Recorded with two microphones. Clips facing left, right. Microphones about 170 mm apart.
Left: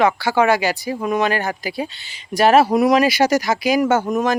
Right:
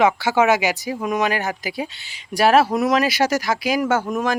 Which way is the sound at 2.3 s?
5° right (ahead or behind).